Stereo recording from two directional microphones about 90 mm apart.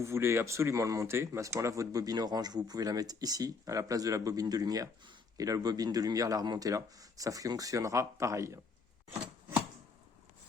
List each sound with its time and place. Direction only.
0.0 s speech: 30° right (ahead or behind)